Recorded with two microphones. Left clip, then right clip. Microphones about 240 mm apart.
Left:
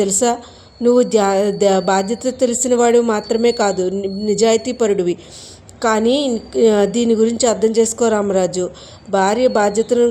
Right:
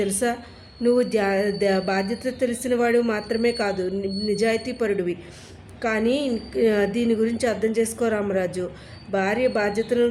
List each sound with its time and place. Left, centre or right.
0.0 s a woman's voice: left